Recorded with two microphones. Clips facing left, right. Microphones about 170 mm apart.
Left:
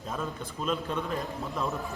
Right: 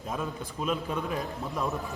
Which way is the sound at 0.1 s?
10° right (ahead or behind).